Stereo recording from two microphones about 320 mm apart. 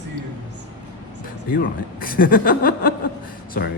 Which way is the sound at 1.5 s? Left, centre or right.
Left.